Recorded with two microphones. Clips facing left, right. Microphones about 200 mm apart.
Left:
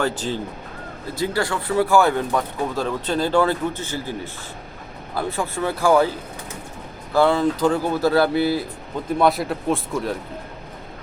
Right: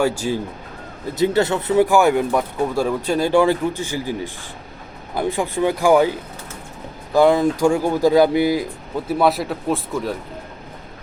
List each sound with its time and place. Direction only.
0.0 s speech: 10° right (ahead or behind)
1.1 s speech: 20° right (ahead or behind)
7.1 s speech: 15° right (ahead or behind)
9.0 s speech: 5° right (ahead or behind)